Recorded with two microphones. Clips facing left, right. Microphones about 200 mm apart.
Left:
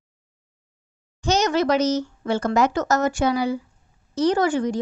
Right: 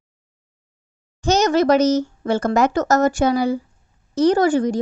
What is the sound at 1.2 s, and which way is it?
A woman's voice, 45° right (ahead or behind).